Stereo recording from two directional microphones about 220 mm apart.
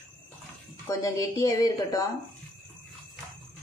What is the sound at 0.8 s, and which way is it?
Speech, 15° left (ahead or behind).